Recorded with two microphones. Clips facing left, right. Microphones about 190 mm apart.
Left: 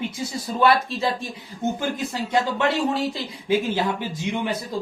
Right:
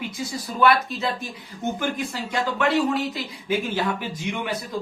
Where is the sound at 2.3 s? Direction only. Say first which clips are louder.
Left 1 dB; 25° left (ahead or behind).